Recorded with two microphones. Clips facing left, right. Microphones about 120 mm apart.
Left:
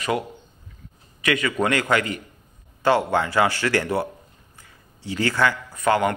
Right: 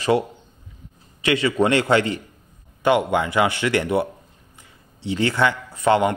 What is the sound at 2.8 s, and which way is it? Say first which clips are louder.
A man's voice: right 1 dB; 20° right (ahead or behind).